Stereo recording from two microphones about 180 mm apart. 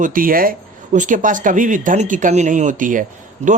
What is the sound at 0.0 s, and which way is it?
Speech, 50° right (ahead or behind).